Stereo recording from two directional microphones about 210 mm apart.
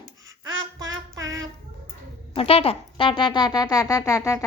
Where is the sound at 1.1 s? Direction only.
15° right (ahead or behind).